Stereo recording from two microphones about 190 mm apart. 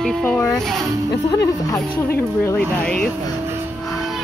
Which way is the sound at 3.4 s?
15° right (ahead or behind).